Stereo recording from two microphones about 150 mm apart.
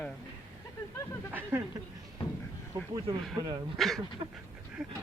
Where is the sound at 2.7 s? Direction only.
30° right (ahead or behind).